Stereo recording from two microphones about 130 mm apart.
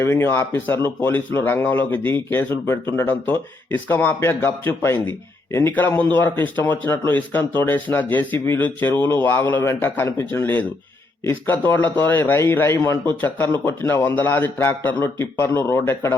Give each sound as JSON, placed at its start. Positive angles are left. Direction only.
{"t": 0.0, "sound": "speech", "side_deg": 15}